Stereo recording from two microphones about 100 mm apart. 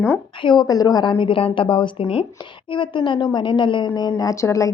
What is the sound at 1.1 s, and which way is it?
Speech, 60° left (ahead or behind).